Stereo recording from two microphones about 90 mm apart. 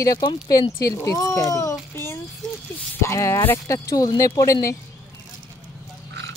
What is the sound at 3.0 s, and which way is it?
Speech, 30° left (ahead or behind).